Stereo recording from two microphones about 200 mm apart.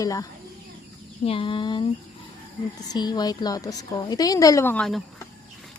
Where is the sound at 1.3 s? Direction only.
25° left (ahead or behind).